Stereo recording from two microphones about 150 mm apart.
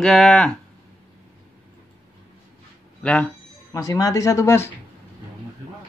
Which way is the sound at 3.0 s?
5° left (ahead or behind).